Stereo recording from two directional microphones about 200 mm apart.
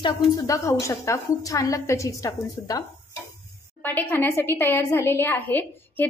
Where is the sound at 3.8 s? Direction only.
10° left (ahead or behind).